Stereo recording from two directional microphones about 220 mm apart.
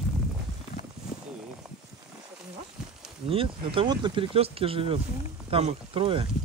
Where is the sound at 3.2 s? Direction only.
25° right (ahead or behind).